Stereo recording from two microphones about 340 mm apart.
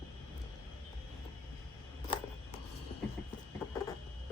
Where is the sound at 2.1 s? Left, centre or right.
Centre.